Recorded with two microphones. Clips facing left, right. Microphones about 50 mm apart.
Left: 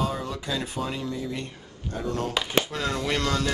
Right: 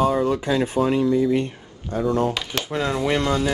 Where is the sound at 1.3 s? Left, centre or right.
Right.